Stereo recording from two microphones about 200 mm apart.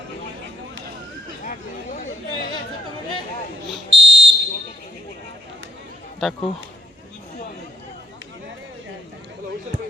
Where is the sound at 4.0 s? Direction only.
60° right (ahead or behind).